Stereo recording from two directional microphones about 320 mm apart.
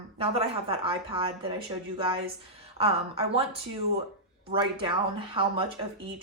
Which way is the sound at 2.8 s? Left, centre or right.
Centre.